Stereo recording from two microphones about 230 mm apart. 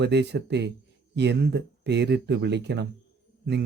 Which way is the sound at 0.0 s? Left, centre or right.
Right.